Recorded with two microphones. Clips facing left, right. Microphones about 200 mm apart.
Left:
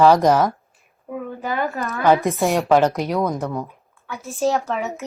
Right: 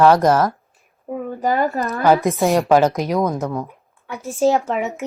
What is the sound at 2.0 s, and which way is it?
A woman's voice, 10° right (ahead or behind).